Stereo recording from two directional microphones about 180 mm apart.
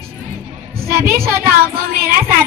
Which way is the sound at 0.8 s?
55° right (ahead or behind).